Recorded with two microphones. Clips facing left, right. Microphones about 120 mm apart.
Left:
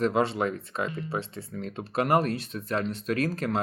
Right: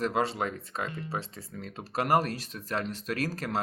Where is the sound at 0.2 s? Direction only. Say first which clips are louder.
Left 4 dB; 35° right (ahead or behind).